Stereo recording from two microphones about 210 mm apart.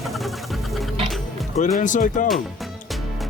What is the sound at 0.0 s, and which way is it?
Music, centre (ahead or behind).